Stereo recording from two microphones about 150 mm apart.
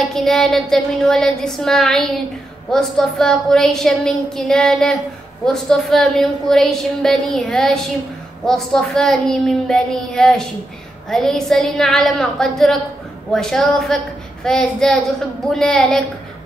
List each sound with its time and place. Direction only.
0.0 s a woman's voice: centre (ahead or behind)